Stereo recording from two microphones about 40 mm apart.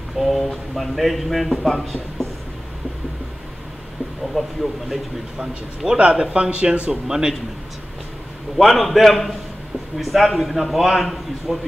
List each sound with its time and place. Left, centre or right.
0.2 s a man's voice: centre
4.4 s a man's voice: centre
5.9 s speech: right
6.9 s speech: centre
8.5 s a man's voice: centre